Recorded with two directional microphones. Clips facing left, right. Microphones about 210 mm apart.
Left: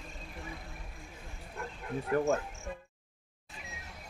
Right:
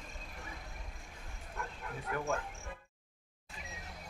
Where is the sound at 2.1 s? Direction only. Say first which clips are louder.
Left 8 dB; 35° left (ahead or behind).